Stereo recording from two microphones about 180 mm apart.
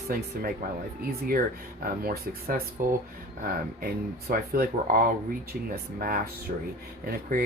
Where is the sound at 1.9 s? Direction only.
55° right (ahead or behind).